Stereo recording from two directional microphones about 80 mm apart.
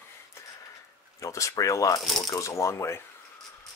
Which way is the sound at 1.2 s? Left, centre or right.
Left.